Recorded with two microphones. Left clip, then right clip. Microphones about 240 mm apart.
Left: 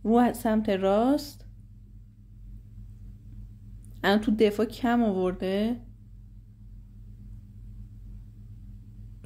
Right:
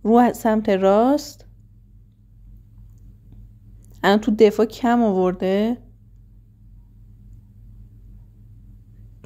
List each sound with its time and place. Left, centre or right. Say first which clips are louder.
0.0 s speech: right 8 dB; right
4.0 s speech: right 8 dB; right